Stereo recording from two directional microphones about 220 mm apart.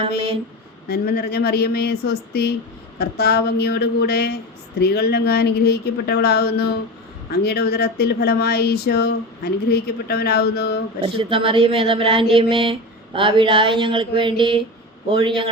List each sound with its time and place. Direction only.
0.9 s speech: 45° left (ahead or behind)
11.0 s speech: 25° right (ahead or behind)